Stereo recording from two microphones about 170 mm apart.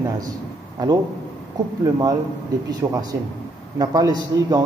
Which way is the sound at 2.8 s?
20° right (ahead or behind).